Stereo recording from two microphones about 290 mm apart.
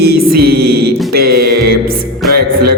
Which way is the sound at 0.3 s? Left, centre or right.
Right.